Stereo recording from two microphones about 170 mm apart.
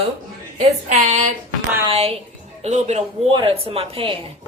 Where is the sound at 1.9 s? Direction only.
35° right (ahead or behind).